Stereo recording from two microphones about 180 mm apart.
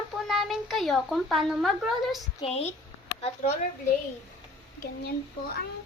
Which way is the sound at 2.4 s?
35° left (ahead or behind).